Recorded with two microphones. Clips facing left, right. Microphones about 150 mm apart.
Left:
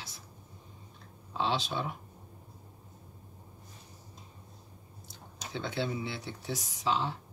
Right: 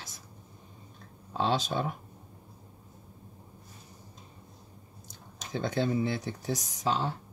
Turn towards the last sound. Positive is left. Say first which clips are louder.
# right 1 dB
turn(degrees=-45)  # may be behind; listen again after turning